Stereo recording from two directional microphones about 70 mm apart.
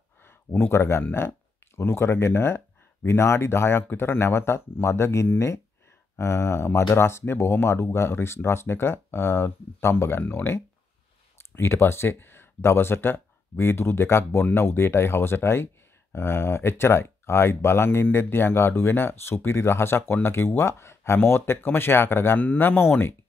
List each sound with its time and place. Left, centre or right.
0.2 s speech: left